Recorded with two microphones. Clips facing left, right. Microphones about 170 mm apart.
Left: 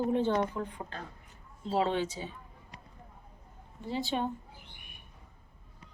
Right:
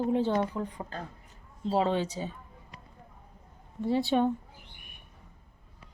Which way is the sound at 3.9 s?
60° right (ahead or behind).